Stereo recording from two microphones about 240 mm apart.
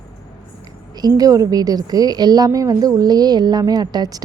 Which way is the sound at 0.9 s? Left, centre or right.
Centre.